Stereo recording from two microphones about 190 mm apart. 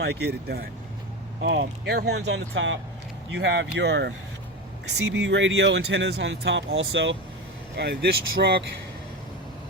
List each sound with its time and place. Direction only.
0.0 s speech: 60° right (ahead or behind)
1.4 s speech: 70° right (ahead or behind)
7.8 s speech: 60° right (ahead or behind)